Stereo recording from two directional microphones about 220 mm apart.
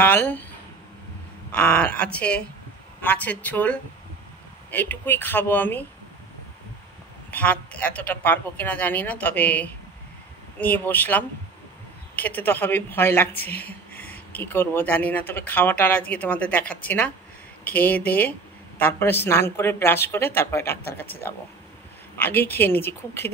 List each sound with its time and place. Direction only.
0.0 s speech: 10° left (ahead or behind)
1.5 s speech: 5° left (ahead or behind)
7.2 s speech: 5° left (ahead or behind)